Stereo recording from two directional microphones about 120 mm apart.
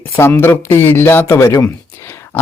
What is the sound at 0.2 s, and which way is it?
A man's voice, 20° left (ahead or behind).